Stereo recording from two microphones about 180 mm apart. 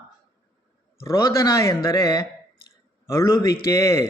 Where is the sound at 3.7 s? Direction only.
15° left (ahead or behind).